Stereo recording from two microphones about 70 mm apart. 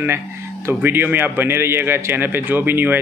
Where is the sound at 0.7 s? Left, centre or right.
Right.